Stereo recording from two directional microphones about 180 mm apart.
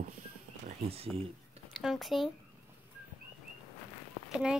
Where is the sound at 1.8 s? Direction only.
Centre (ahead or behind).